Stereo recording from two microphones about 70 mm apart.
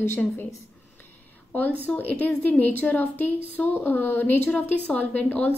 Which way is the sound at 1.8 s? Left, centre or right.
Left.